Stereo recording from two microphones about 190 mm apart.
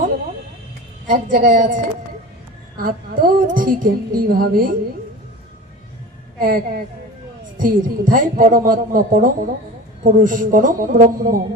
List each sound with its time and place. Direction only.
1.1 s speech: 45° right (ahead or behind)
6.4 s speech: 50° right (ahead or behind)